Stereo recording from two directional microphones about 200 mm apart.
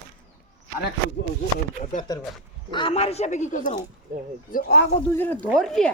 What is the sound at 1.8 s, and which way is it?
Speech, 35° left (ahead or behind).